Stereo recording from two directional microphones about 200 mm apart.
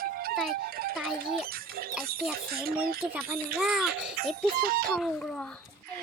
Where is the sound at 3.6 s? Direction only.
5° right (ahead or behind).